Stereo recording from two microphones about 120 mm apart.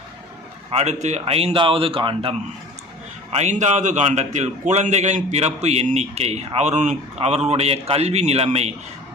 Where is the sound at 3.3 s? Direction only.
75° right (ahead or behind).